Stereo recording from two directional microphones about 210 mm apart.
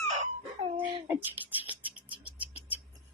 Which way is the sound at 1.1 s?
10° right (ahead or behind).